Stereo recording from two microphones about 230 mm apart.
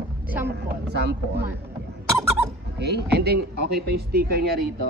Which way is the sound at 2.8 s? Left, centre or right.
Right.